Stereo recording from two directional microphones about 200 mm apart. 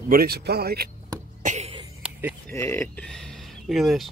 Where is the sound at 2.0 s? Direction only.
5° right (ahead or behind).